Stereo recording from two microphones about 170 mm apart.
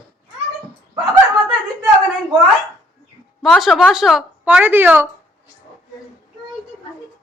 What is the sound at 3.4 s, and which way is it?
Speech, centre (ahead or behind).